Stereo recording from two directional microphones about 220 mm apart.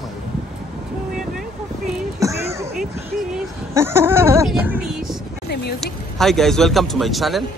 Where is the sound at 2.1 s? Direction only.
15° right (ahead or behind).